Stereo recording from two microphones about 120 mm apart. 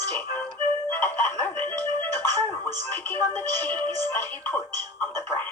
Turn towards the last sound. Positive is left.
turn(degrees=20)  # may be behind; listen again after turning